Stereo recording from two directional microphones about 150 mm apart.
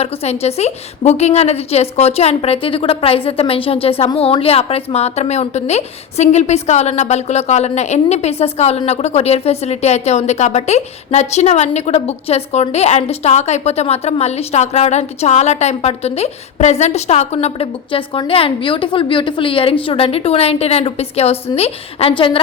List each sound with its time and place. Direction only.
0.0 s a woman's voice: 45° left (ahead or behind)